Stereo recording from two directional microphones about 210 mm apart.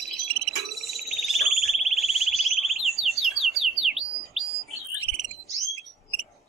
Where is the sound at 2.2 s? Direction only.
Centre (ahead or behind).